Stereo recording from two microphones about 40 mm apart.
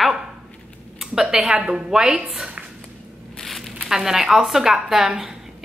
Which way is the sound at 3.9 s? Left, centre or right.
Centre.